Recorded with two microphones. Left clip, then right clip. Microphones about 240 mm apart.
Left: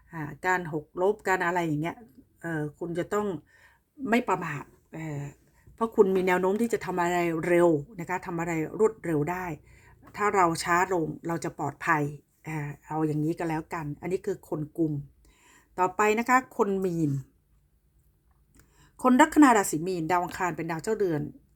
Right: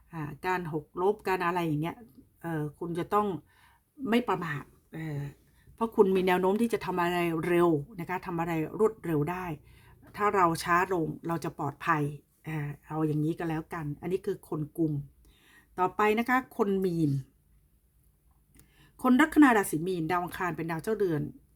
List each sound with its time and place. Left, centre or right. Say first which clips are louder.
0.1 s speech: left 4 dB; centre
15.7 s speech: left 2 dB; centre
18.8 s speech: left 4 dB; centre